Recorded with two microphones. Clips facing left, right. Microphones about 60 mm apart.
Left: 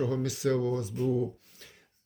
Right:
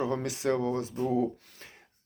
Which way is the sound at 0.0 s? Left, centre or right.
Right.